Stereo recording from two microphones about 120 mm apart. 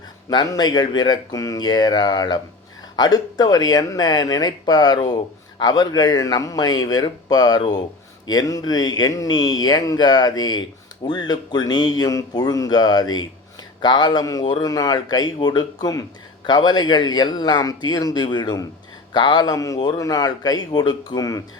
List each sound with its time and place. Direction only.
0.3 s speech: 35° left (ahead or behind)